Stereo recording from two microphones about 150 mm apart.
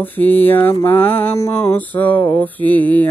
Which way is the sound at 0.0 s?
10° left (ahead or behind).